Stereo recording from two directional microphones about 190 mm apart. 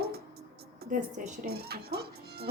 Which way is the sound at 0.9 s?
50° right (ahead or behind).